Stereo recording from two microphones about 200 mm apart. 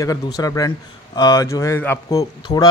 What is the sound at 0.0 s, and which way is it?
A man's voice, 20° left (ahead or behind).